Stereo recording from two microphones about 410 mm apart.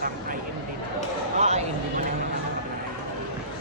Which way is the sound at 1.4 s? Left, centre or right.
Centre.